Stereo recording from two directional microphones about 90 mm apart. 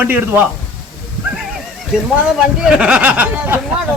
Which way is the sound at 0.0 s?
20° right (ahead or behind).